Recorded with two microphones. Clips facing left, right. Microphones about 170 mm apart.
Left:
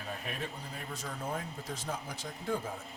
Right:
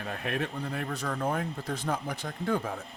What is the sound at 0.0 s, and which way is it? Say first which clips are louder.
Speech: right 7 dB; 65° right (ahead or behind).